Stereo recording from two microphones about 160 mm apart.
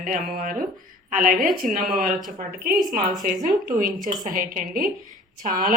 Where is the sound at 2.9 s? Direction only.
60° right (ahead or behind).